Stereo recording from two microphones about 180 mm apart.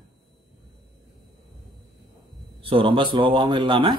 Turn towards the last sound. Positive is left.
turn(degrees=-25)  # may be behind; listen again after turning